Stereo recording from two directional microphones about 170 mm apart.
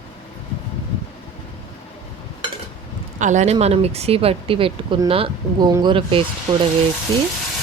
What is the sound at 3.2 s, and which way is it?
A woman's voice, 45° right (ahead or behind).